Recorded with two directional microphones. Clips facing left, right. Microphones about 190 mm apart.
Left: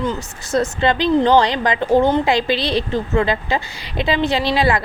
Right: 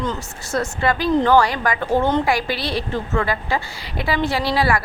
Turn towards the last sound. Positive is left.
turn(degrees=20)  # may be behind; listen again after turning